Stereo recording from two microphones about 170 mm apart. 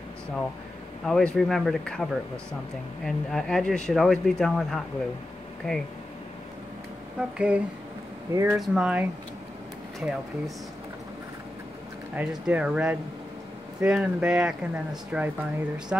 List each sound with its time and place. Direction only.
1.0 s speech: 5° left (ahead or behind)
3.1 s speech: centre (ahead or behind)
7.2 s speech: 5° right (ahead or behind)
8.3 s speech: 20° right (ahead or behind)
8.5 s speech: 5° right (ahead or behind)
12.2 s speech: 5° right (ahead or behind)